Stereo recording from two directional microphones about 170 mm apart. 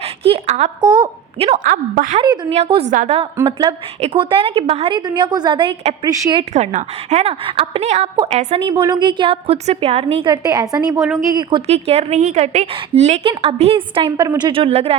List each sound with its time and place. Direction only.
0.0 s a woman's voice: 35° right (ahead or behind)
0.8 s a woman's voice: 25° right (ahead or behind)
1.5 s a woman's voice: 50° right (ahead or behind)
2.1 s a woman's voice: 25° right (ahead or behind)
2.9 s a woman's voice: 45° right (ahead or behind)
3.3 s a woman's voice: 25° right (ahead or behind)
6.5 s a woman's voice: 45° right (ahead or behind)
8.6 s a woman's voice: 25° right (ahead or behind)
10.9 s a woman's voice: 10° right (ahead or behind)
11.3 s a woman's voice: 25° right (ahead or behind)
11.6 s a woman's voice: 40° right (ahead or behind)